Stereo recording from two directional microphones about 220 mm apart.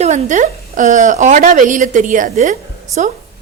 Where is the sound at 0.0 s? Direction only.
30° right (ahead or behind).